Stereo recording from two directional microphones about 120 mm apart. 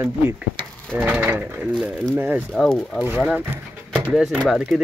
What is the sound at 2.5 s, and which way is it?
Speech, 5° left (ahead or behind).